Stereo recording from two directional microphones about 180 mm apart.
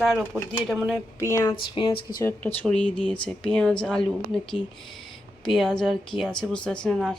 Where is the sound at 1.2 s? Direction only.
15° left (ahead or behind).